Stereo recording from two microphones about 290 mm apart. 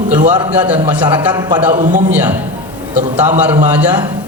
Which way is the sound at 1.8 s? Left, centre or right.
Right.